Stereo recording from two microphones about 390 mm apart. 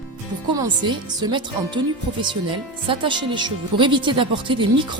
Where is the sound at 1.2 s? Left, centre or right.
Centre.